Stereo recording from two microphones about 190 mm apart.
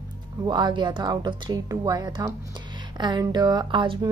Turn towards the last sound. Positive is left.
turn(degrees=-25)  # may be behind; listen again after turning